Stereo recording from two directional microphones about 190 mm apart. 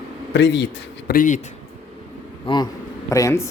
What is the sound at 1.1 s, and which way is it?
Speech, 45° left (ahead or behind).